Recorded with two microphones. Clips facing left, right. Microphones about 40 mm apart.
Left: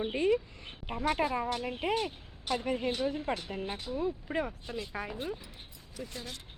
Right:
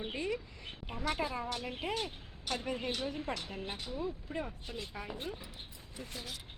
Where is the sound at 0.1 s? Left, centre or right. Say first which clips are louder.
Left 9 dB; left.